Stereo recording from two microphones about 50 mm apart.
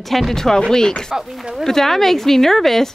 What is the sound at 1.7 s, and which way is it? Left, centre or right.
A woman's voice, centre.